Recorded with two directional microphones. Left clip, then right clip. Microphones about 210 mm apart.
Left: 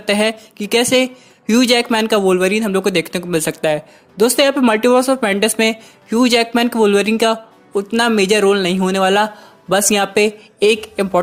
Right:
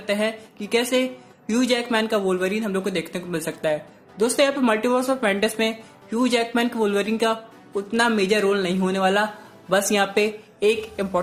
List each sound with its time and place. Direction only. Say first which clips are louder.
0.0 s speech: left 7 dB; 45° left (ahead or behind)